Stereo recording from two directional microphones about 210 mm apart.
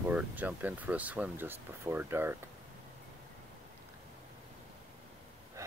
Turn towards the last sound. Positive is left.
turn(degrees=-15)  # may be behind; listen again after turning